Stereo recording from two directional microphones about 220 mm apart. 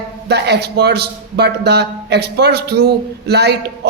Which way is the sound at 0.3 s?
50° right (ahead or behind).